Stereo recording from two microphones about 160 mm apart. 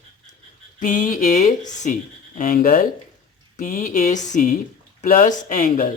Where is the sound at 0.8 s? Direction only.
55° left (ahead or behind).